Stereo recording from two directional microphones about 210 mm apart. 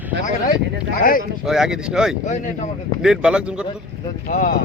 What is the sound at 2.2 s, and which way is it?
Speech, 35° left (ahead or behind).